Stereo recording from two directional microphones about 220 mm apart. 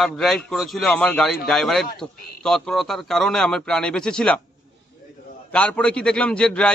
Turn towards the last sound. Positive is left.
turn(degrees=5)  # may be behind; listen again after turning